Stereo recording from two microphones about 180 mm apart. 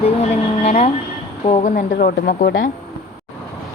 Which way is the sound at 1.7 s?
50° left (ahead or behind).